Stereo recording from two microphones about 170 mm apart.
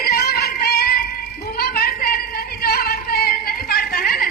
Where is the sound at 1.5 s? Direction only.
60° left (ahead or behind).